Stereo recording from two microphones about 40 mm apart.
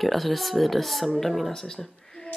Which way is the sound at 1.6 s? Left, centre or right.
Centre.